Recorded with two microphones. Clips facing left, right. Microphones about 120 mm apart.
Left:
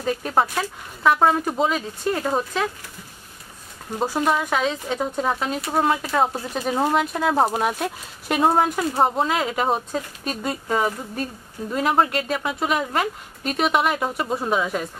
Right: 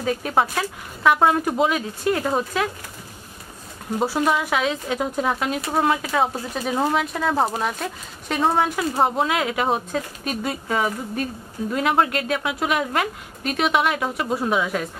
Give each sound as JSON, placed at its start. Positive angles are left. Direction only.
{"t": 0.0, "sound": "speech", "side_deg": 0}
{"t": 4.0, "sound": "speech", "side_deg": -5}